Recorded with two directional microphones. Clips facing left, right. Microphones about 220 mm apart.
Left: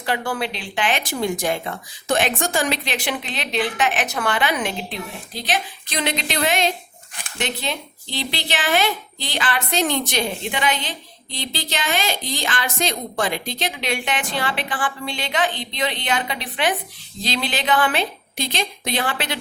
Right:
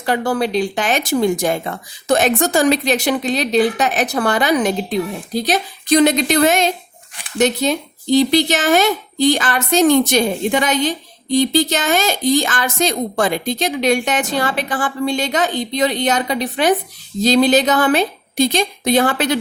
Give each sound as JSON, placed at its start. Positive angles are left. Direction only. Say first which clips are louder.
{"t": 0.0, "sound": "a woman's voice", "louder": "right 6 dB", "side_deg": -40}